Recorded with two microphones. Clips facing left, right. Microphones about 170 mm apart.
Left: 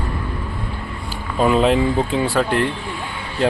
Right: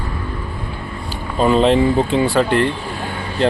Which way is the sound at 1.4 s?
5° left (ahead or behind).